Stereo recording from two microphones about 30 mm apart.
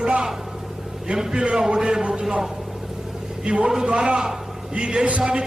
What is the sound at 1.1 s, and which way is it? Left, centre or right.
A man's voice, centre.